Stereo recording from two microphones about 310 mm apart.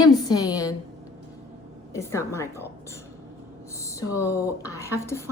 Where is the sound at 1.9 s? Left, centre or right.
Centre.